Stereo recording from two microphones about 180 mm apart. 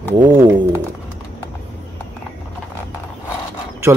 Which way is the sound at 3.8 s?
15° right (ahead or behind).